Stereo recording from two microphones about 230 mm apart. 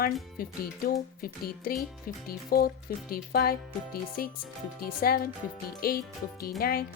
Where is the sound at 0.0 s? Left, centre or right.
Left.